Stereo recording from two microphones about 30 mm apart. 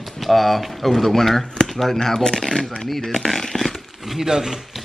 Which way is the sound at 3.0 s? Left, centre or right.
Centre.